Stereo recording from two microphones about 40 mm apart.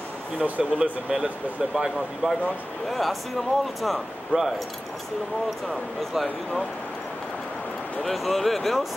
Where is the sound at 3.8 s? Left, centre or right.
Centre.